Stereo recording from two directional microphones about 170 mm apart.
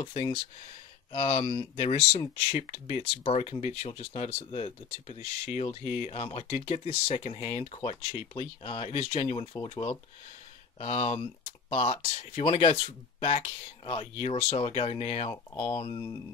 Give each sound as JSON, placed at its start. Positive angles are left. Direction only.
{"t": 0.0, "sound": "speech", "side_deg": 30}